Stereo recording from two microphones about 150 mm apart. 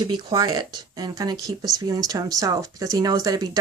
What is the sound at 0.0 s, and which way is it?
Speech, 25° right (ahead or behind).